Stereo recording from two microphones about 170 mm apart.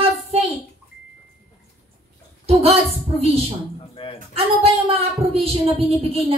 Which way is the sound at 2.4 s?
35° right (ahead or behind).